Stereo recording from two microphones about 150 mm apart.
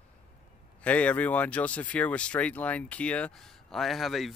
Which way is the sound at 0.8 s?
10° left (ahead or behind).